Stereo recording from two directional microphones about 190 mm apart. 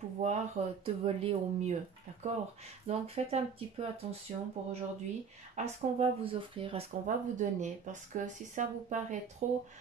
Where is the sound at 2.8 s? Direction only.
35° right (ahead or behind).